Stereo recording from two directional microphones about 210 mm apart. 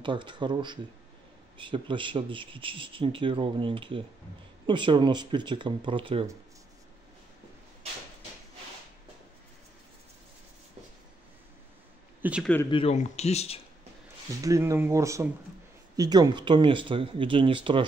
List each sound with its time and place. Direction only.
0.0 s speech: 20° right (ahead or behind)
12.2 s speech: 5° right (ahead or behind)
12.6 s speech: 25° left (ahead or behind)
14.4 s speech: 15° right (ahead or behind)